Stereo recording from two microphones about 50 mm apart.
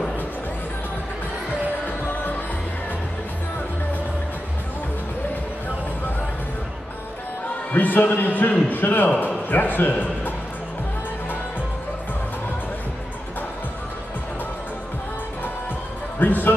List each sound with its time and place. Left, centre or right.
7.7 s a man's voice: left
16.2 s music: left